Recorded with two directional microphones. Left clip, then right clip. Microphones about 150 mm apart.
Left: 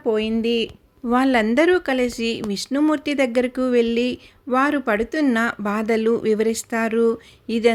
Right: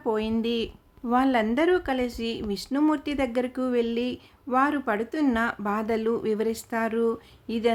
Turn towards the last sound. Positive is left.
turn(degrees=20)  # may be behind; listen again after turning